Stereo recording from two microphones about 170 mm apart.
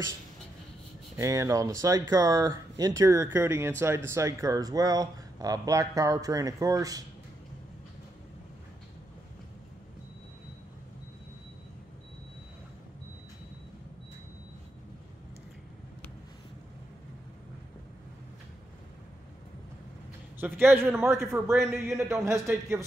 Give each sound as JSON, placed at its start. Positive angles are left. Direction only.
{"t": 1.1, "sound": "speech", "side_deg": -15}
{"t": 20.3, "sound": "speech", "side_deg": -10}